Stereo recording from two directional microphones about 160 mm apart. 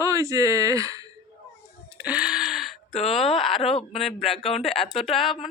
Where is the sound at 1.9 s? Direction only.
10° right (ahead or behind).